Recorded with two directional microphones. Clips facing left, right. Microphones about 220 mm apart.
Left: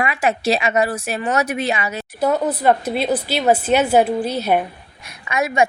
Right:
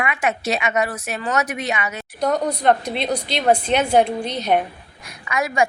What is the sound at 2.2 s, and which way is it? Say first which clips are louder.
Speech: left 2 dB; 5° left (ahead or behind).